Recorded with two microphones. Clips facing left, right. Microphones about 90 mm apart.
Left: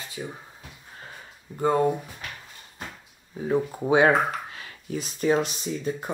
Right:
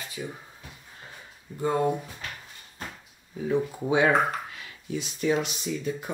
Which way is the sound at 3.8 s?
40° left (ahead or behind).